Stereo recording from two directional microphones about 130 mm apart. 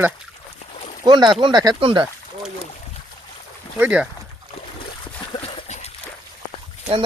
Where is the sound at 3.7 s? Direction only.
10° right (ahead or behind).